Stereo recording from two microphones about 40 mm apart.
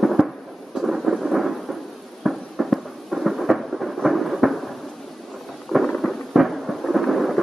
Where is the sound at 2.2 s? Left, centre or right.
Centre.